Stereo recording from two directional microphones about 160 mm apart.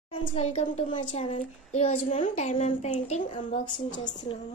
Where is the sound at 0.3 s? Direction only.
45° left (ahead or behind).